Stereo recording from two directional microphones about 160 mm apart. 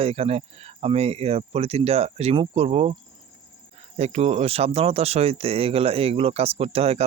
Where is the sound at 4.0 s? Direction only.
40° right (ahead or behind).